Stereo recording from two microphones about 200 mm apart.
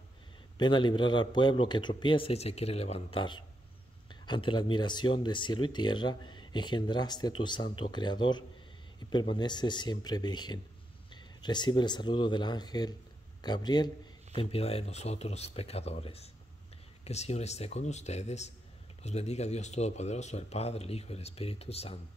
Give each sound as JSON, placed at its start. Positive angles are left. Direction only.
{"t": 0.6, "sound": "speech", "side_deg": 25}